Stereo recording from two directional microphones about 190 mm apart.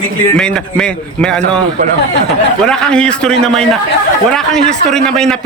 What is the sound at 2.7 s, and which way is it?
Speech, 5° left (ahead or behind).